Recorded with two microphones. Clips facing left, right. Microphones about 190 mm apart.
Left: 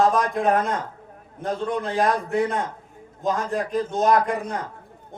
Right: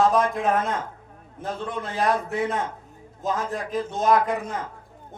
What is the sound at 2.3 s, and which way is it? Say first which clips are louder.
A man's voice: left 3 dB; centre (ahead or behind).